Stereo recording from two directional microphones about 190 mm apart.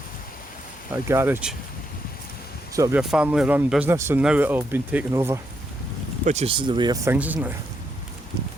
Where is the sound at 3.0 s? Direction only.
5° right (ahead or behind).